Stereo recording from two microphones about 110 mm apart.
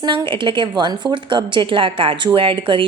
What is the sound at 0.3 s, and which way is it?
A woman's voice, 50° right (ahead or behind).